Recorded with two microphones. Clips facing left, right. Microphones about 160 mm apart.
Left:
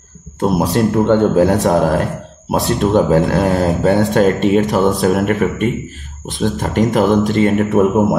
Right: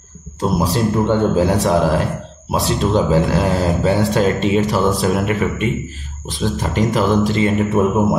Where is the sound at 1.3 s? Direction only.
45° left (ahead or behind).